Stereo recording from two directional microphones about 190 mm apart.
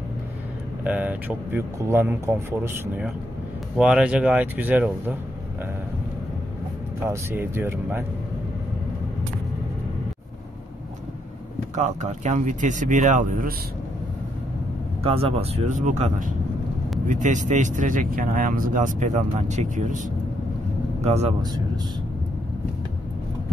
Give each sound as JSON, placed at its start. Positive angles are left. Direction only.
{"t": 0.8, "sound": "speech", "side_deg": -5}
{"t": 7.0, "sound": "speech", "side_deg": -15}
{"t": 11.7, "sound": "speech", "side_deg": -40}
{"t": 15.0, "sound": "speech", "side_deg": -30}
{"t": 21.0, "sound": "speech", "side_deg": -35}